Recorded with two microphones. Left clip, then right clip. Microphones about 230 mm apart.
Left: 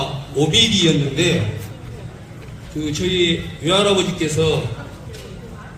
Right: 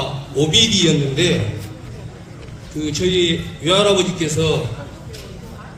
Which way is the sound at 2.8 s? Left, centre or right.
Right.